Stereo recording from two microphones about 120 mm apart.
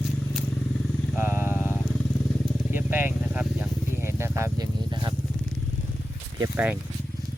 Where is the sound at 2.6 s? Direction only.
20° right (ahead or behind).